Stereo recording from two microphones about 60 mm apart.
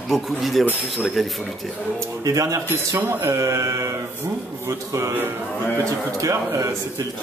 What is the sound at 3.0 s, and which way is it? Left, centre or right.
A man's voice, right.